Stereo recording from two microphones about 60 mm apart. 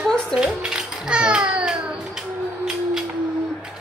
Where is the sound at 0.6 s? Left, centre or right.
Centre.